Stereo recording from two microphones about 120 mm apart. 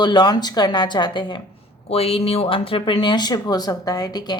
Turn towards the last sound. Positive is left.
turn(degrees=35)  # may be behind; listen again after turning